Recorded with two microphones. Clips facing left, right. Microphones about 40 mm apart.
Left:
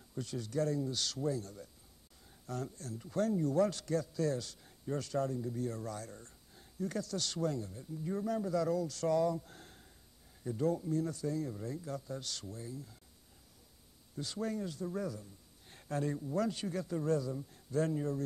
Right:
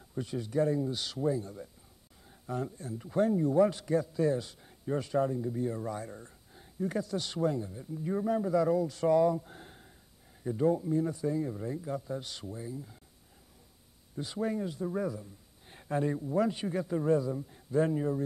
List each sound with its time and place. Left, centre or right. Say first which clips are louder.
0.1 s speech: right 5 dB; right
14.1 s speech: right 5 dB; centre